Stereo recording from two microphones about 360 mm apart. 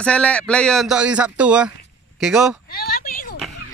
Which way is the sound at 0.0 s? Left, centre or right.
Centre.